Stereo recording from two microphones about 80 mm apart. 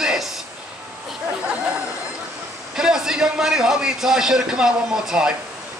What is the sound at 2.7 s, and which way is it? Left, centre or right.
A man's voice, centre.